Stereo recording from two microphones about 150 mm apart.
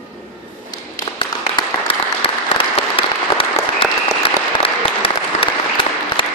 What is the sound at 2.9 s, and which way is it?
Applause, 35° left (ahead or behind).